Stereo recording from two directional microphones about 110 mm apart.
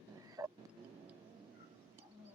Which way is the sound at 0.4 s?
30° right (ahead or behind).